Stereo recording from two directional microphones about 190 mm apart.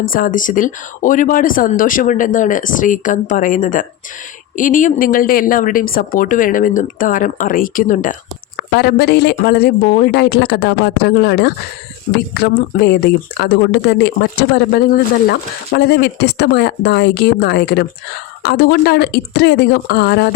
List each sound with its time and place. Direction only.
0.0 s speech: 50° left (ahead or behind)
8.7 s speech: 55° left (ahead or behind)